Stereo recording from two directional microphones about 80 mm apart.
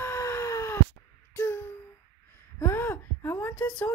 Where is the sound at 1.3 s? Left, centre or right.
Left.